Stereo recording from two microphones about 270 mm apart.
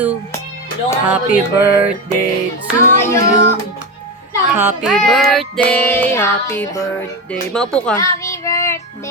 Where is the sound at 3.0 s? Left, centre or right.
Centre.